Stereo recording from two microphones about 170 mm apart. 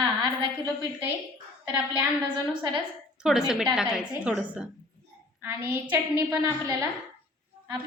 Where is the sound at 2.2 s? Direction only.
30° right (ahead or behind).